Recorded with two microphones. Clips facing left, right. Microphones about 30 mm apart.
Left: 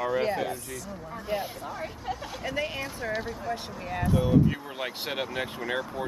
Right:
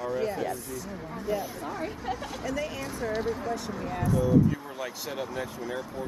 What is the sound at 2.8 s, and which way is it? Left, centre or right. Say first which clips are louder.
Speech: right 2 dB; centre.